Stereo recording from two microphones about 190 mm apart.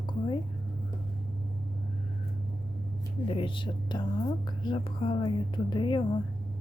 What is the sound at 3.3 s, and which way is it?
Speech, 25° left (ahead or behind).